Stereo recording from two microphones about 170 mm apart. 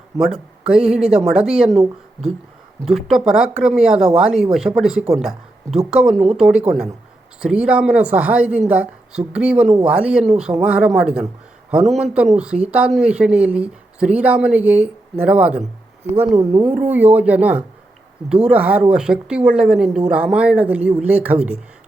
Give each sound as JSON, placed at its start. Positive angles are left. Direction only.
{"t": 0.2, "sound": "speech", "side_deg": -5}
{"t": 2.8, "sound": "speech", "side_deg": 0}
{"t": 16.1, "sound": "speech", "side_deg": -20}
{"t": 16.7, "sound": "speech", "side_deg": -10}